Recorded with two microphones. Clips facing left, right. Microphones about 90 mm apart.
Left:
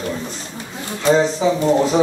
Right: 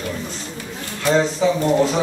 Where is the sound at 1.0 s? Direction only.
15° left (ahead or behind).